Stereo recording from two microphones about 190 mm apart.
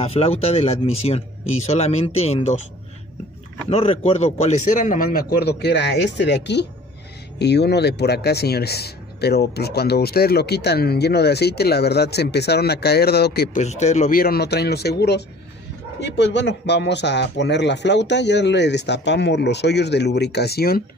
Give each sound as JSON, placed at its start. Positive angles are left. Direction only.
{"t": 0.0, "sound": "speech", "side_deg": 30}
{"t": 3.7, "sound": "speech", "side_deg": 30}
{"t": 13.6, "sound": "speech", "side_deg": 35}